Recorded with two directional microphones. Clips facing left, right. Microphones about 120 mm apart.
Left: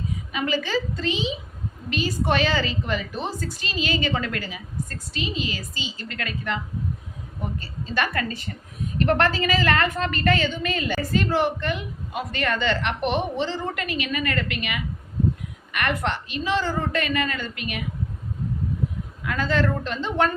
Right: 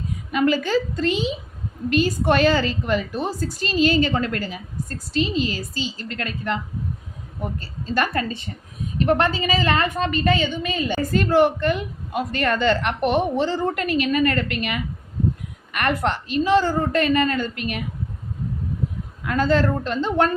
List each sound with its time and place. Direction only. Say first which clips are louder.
0.3 s a woman's voice: right 7 dB; 50° right (ahead or behind)
7.9 s a woman's voice: right 3 dB; 35° right (ahead or behind)
9.0 s a woman's voice: right 1 dB; 15° right (ahead or behind)
11.1 s a woman's voice: right 6 dB; 50° right (ahead or behind)
19.2 s a woman's voice: right 4 dB; 35° right (ahead or behind)